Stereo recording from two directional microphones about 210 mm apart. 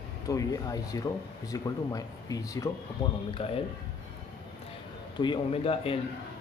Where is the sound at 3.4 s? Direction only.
25° left (ahead or behind).